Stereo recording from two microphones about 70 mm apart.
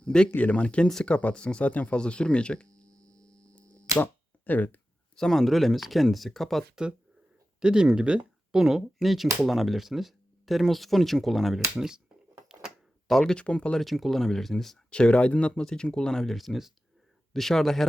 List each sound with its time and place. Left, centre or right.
0.0 s a sound: centre
0.3 s speech: centre
2.8 s sine wave: right
4.0 s a sound: left
5.1 s speech: centre
7.6 s speech: centre
11.8 s speech: centre
13.1 s speech: centre
13.7 s speech: centre
14.8 s speech: centre